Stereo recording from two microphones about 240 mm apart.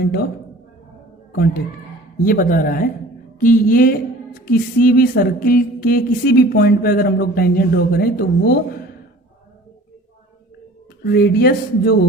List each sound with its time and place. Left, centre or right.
0.0 s speech: left
2.2 s speech: left
11.0 s speech: left